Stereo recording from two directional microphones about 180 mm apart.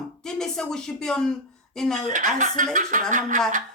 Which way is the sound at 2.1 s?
45° right (ahead or behind).